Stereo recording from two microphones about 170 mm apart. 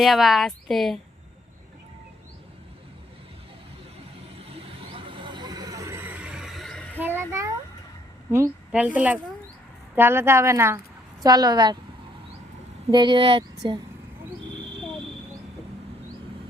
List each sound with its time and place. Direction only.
0.0 s speech: centre (ahead or behind)
4.9 s vehicle: 30° right (ahead or behind); by 7.0 s 5° left (ahead or behind)
7.0 s a sound: 15° right (ahead or behind)
8.3 s speech: 10° right (ahead or behind)
12.9 s speech: 25° right (ahead or behind)